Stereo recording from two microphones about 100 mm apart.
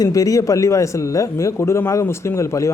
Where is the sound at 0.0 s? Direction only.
35° left (ahead or behind).